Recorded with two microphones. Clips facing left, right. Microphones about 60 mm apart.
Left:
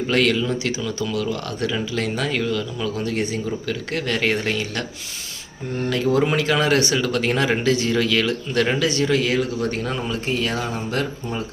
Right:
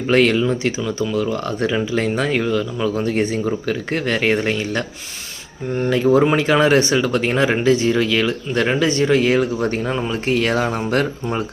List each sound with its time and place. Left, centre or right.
0.1 s speech: right
8.8 s speech: right
10.2 s speech: right